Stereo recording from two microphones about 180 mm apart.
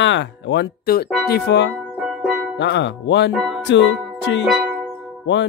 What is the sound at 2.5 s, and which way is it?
Speech, 75° left (ahead or behind).